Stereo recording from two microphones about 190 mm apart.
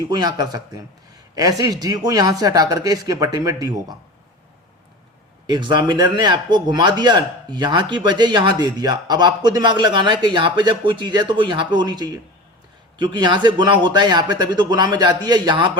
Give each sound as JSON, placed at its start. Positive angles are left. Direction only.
{"t": 0.1, "sound": "speech", "side_deg": -20}
{"t": 5.5, "sound": "speech", "side_deg": -25}